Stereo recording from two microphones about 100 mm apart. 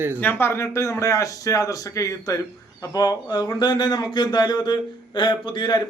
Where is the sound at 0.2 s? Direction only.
20° left (ahead or behind).